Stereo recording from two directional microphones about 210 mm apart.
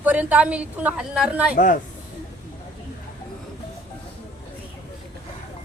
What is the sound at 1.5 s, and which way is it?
Speech, 40° left (ahead or behind).